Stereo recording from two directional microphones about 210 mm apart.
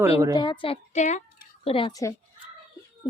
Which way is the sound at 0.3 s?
25° left (ahead or behind).